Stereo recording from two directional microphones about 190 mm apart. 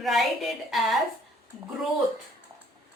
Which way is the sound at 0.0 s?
Centre (ahead or behind).